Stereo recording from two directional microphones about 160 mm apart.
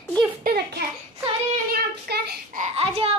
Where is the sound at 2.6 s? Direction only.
40° right (ahead or behind).